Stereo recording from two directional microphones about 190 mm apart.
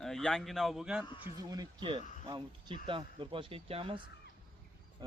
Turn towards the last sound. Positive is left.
turn(degrees=-20)  # may be behind; listen again after turning